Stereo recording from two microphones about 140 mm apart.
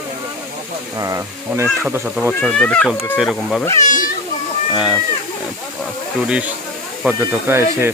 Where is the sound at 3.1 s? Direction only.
5° right (ahead or behind).